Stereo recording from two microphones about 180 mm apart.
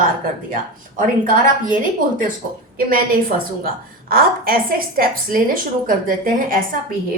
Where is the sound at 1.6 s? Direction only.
50° right (ahead or behind).